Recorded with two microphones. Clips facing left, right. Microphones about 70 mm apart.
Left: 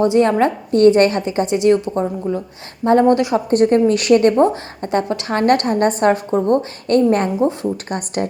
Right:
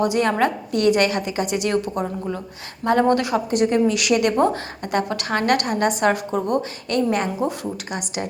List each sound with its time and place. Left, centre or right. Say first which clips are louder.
0.0 s a woman's voice: left 5 dB; left
3.5 s a woman's voice: left 6 dB; left
6.8 s a woman's voice: left 8 dB; left